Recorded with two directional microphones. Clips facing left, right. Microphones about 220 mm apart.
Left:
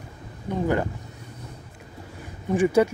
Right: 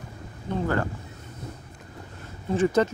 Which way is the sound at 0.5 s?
15° left (ahead or behind).